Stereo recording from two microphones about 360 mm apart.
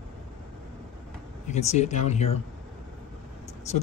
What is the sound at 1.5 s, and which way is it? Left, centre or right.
Speech, centre.